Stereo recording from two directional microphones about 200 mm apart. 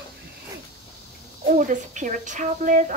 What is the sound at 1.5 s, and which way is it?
Speech, 40° right (ahead or behind).